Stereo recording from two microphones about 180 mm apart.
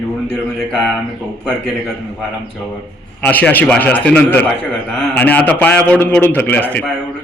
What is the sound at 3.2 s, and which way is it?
A man's voice, 10° left (ahead or behind).